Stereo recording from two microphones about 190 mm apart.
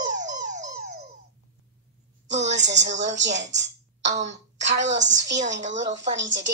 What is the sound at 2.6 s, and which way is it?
A woman's voice, 70° right (ahead or behind).